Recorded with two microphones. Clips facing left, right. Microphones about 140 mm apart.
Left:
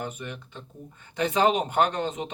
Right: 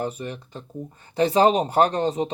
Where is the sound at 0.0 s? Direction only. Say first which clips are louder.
Right 6 dB; 35° right (ahead or behind).